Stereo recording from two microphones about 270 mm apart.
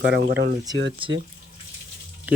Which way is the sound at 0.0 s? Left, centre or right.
Right.